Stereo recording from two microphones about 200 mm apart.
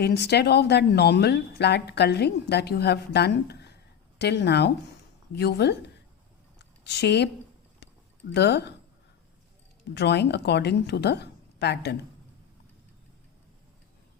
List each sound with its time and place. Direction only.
0.0 s a woman's voice: 55° left (ahead or behind)
6.6 s a sound: 60° left (ahead or behind)
9.9 s a woman's voice: 60° left (ahead or behind)